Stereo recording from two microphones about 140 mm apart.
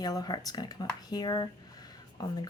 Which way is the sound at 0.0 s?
25° left (ahead or behind).